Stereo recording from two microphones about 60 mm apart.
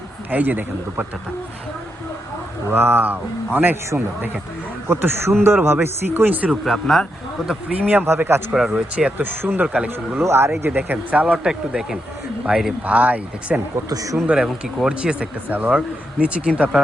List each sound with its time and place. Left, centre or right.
0.3 s speech: right
2.6 s speech: right
4.9 s speech: right
6.7 s speech: centre
7.8 s speech: right
8.0 s speech: right
8.5 s speech: centre
9.2 s speech: right
9.6 s speech: centre
10.2 s speech: right
10.6 s speech: right; by 12.7 s centre
12.8 s speech: right
13.7 s speech: right
14.3 s speech: centre